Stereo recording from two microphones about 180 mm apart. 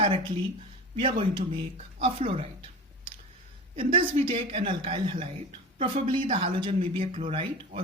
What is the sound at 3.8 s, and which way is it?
Speech, 30° right (ahead or behind).